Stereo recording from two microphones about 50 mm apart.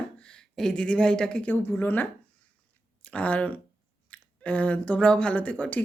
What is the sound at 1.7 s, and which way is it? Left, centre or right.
Speech, left.